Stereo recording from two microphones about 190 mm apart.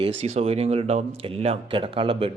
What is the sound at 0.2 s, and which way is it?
Speech, 35° right (ahead or behind).